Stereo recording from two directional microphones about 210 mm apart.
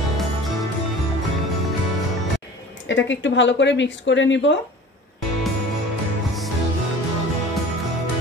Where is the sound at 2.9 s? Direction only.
60° left (ahead or behind).